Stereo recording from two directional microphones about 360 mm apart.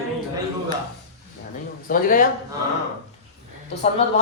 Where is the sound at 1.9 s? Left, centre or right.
Left.